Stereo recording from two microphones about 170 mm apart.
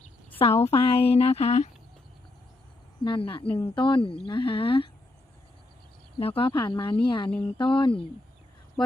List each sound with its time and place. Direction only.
0.6 s speech: 35° left (ahead or behind)
3.0 s speech: 30° left (ahead or behind)
6.1 s speech: 35° left (ahead or behind)